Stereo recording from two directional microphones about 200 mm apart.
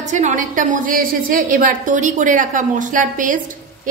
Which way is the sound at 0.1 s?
35° right (ahead or behind).